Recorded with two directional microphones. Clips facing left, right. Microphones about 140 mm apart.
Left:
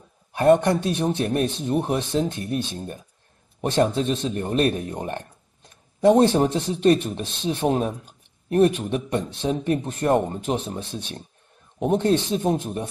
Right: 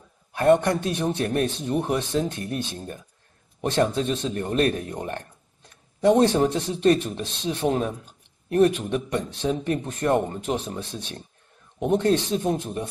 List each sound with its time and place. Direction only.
0.3 s speech: 25° left (ahead or behind)
3.6 s speech: 35° left (ahead or behind)
5.9 s speech: 40° left (ahead or behind); by 11.0 s 25° left (ahead or behind)
12.0 s speech: 30° left (ahead or behind)